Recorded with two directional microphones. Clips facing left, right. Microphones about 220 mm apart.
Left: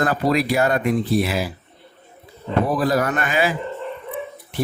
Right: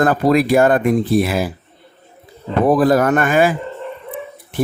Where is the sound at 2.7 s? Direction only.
50° right (ahead or behind).